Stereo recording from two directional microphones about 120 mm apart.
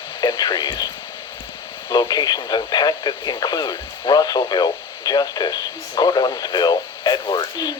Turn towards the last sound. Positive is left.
turn(degrees=35)  # may be behind; listen again after turning